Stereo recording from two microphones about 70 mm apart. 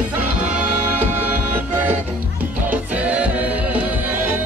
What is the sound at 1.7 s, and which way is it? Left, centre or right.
Music, right.